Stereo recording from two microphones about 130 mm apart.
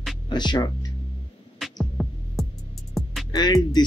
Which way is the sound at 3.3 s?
35° left (ahead or behind).